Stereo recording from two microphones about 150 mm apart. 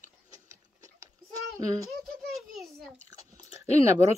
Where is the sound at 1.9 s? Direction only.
Centre (ahead or behind).